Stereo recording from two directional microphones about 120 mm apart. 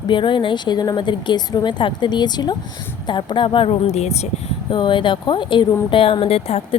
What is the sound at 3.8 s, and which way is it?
Speech, 65° left (ahead or behind).